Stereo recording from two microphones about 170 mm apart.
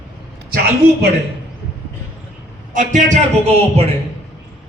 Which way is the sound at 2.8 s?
45° right (ahead or behind).